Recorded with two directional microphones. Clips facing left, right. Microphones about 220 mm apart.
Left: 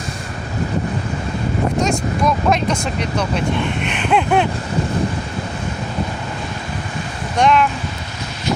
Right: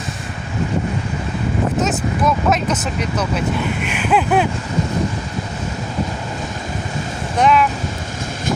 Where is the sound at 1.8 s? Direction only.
5° right (ahead or behind).